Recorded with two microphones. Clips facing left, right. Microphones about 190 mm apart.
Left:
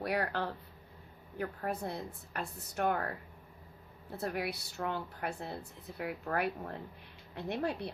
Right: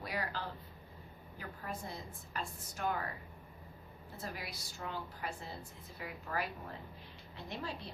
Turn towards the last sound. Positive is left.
turn(degrees=60)  # may be behind; listen again after turning